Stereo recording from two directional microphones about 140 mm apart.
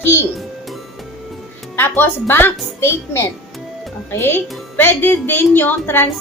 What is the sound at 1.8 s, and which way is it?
A woman's voice, 15° left (ahead or behind).